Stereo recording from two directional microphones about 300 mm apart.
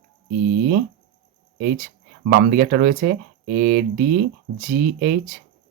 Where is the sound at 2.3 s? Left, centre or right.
Right.